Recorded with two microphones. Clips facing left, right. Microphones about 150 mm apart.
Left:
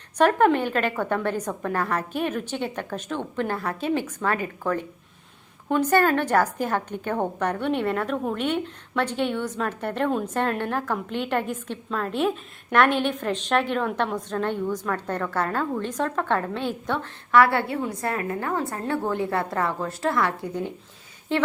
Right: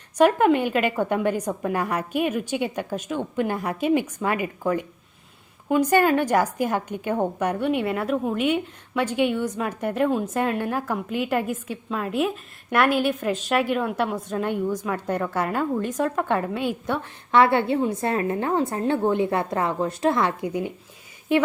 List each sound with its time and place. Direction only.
0.2 s a woman's voice: 10° right (ahead or behind)
17.3 s a woman's voice: 20° right (ahead or behind)